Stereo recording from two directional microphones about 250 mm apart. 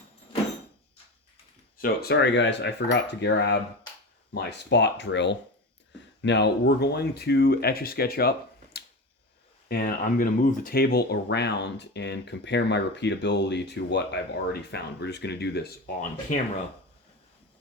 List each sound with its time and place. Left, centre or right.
1.8 s speech: left
9.6 s speech: left